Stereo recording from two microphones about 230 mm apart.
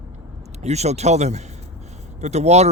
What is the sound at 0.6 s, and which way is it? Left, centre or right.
Speech, right.